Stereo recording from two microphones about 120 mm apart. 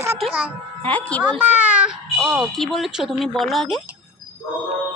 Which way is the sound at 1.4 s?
15° right (ahead or behind).